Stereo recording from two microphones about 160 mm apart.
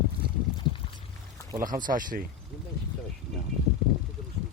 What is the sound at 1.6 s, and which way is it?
Speech, 55° right (ahead or behind).